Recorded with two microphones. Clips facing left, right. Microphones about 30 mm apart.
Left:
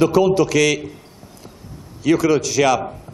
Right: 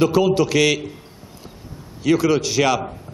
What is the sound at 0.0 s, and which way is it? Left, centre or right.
Speech, centre.